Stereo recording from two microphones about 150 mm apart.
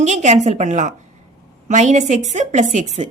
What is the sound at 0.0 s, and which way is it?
A woman's voice, 50° right (ahead or behind).